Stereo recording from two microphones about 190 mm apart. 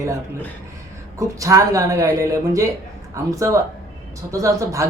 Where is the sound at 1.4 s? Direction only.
15° right (ahead or behind).